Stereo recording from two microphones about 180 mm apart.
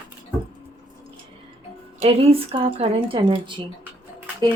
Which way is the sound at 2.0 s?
30° right (ahead or behind).